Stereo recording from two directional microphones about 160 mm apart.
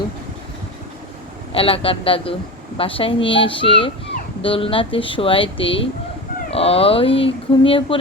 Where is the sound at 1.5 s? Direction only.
35° left (ahead or behind).